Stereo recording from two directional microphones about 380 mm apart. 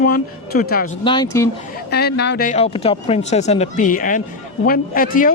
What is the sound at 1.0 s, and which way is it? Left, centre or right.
Speech, centre.